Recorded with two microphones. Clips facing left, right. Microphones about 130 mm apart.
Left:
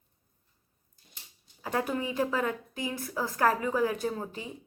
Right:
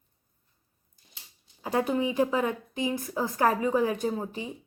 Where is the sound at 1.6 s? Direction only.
20° right (ahead or behind).